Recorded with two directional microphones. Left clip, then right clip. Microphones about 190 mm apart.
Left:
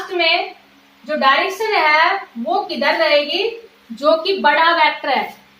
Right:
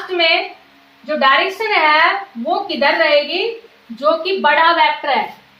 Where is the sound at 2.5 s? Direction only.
10° left (ahead or behind).